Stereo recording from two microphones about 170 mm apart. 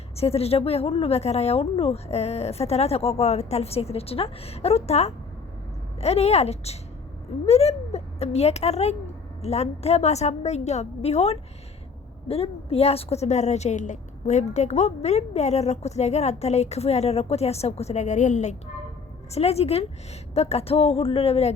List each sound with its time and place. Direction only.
0.2 s a woman's voice: 35° left (ahead or behind)